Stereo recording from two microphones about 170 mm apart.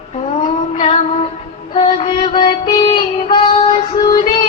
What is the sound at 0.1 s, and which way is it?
Female singing, 40° left (ahead or behind).